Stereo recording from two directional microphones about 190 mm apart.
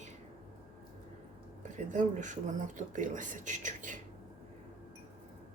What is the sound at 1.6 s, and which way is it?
Speech, 40° right (ahead or behind).